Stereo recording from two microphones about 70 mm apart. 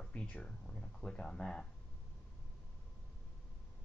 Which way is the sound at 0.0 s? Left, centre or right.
Centre.